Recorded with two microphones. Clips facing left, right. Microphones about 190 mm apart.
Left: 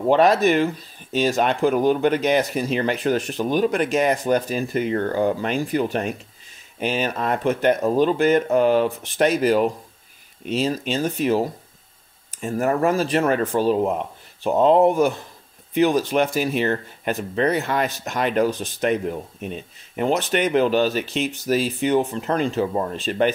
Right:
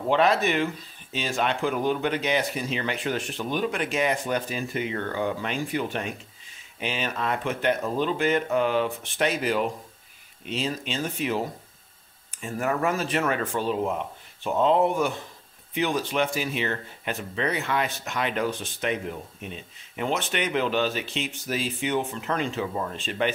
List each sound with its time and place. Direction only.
0.1 s speech: 45° left (ahead or behind)